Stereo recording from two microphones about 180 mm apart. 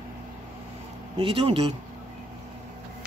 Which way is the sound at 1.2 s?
30° right (ahead or behind).